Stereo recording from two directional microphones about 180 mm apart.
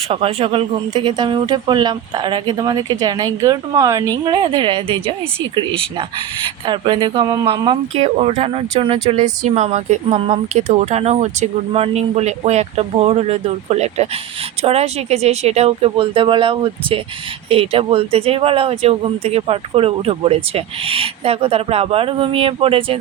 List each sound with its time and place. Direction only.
0.1 s speech: 30° right (ahead or behind)